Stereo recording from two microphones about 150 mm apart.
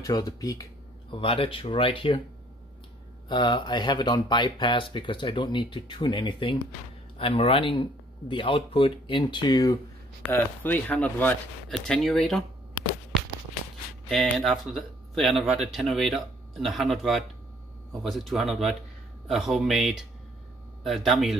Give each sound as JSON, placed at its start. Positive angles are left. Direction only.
{"t": 0.0, "sound": "speech", "side_deg": 25}
{"t": 1.1, "sound": "speech", "side_deg": 35}
{"t": 3.3, "sound": "speech", "side_deg": 30}
{"t": 10.2, "sound": "speech", "side_deg": 10}
{"t": 14.0, "sound": "speech", "side_deg": 0}